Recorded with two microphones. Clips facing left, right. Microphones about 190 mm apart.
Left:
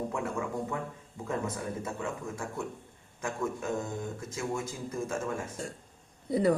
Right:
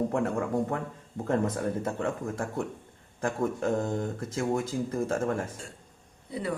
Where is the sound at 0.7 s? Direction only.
55° right (ahead or behind).